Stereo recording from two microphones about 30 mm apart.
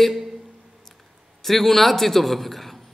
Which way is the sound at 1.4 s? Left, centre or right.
Centre.